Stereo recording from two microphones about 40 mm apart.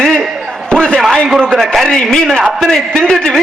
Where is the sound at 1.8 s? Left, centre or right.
Centre.